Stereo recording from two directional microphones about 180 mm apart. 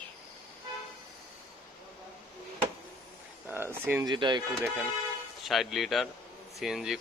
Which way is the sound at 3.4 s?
10° right (ahead or behind).